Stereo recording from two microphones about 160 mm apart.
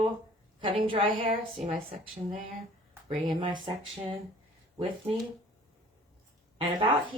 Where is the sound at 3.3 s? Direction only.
30° right (ahead or behind).